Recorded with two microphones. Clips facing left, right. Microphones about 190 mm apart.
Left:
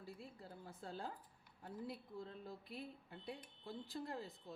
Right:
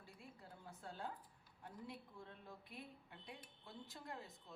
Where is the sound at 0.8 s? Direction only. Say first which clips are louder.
Left 2 dB; 35° left (ahead or behind).